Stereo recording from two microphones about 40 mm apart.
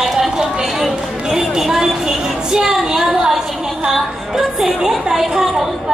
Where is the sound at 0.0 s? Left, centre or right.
Centre.